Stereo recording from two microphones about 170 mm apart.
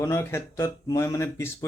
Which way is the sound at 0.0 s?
20° left (ahead or behind).